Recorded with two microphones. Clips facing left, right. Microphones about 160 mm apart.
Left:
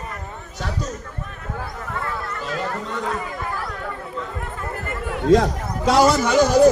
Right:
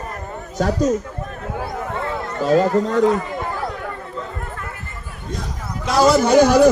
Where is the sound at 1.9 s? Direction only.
25° right (ahead or behind).